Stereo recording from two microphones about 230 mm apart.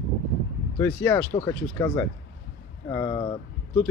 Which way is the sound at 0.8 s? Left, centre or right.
Centre.